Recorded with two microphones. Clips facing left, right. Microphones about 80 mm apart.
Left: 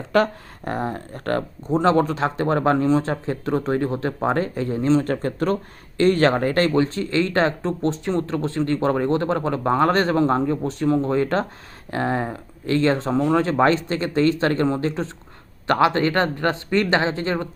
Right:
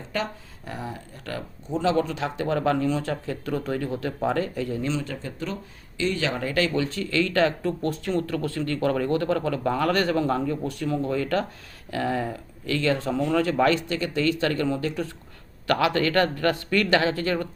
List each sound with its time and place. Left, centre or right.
0.1 s speech: left
5.1 s speech: left